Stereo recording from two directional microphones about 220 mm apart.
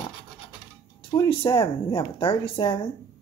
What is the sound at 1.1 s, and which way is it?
Speech, 15° left (ahead or behind).